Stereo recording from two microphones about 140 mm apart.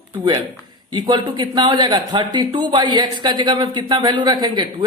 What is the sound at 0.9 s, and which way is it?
Speech, 30° right (ahead or behind).